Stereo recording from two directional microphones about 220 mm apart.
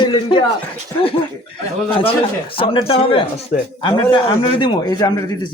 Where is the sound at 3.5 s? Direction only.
40° left (ahead or behind).